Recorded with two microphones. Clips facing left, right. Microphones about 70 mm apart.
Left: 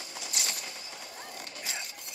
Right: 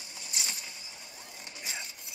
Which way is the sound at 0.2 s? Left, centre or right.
Left.